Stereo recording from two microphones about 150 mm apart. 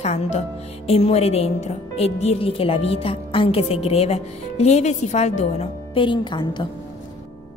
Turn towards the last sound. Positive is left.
turn(degrees=30)  # may be behind; listen again after turning